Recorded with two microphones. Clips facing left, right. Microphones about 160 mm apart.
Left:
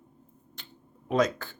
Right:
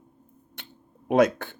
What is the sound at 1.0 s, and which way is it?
Speech, 60° right (ahead or behind).